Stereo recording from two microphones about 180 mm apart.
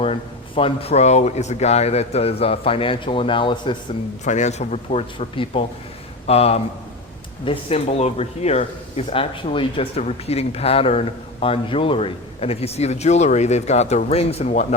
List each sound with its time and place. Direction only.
0.0 s speech: 30° left (ahead or behind)
4.2 s speech: 40° left (ahead or behind)